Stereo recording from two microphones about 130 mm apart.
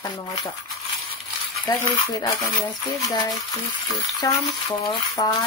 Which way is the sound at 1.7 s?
30° left (ahead or behind).